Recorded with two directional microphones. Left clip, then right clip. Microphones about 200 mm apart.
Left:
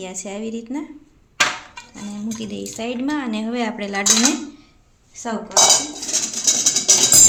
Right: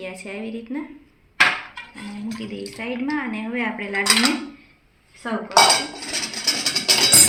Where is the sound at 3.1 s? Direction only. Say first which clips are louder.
Left 2 dB; 70° left (ahead or behind).